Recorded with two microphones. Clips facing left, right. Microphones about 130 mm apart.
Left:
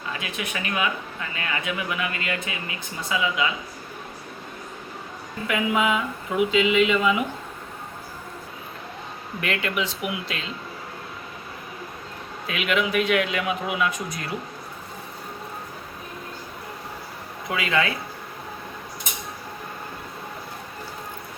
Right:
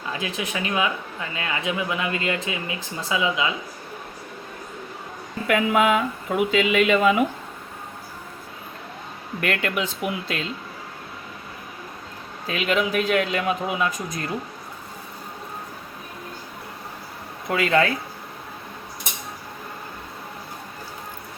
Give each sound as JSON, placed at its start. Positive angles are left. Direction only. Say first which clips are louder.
{"t": 0.2, "sound": "speech", "louder": "right 3 dB", "side_deg": -30}
{"t": 5.5, "sound": "speech", "louder": "right 4 dB", "side_deg": -55}
{"t": 9.4, "sound": "speech", "louder": "right 2 dB", "side_deg": -45}
{"t": 12.5, "sound": "a man's voice", "louder": "right 1 dB", "side_deg": -35}
{"t": 17.5, "sound": "speech", "louder": "right 4 dB", "side_deg": -40}